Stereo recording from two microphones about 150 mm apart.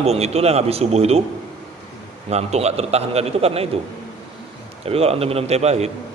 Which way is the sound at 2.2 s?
45° right (ahead or behind).